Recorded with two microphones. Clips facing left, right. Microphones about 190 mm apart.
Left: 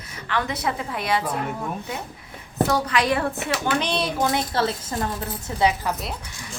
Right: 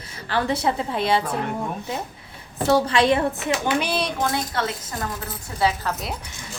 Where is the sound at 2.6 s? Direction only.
30° right (ahead or behind).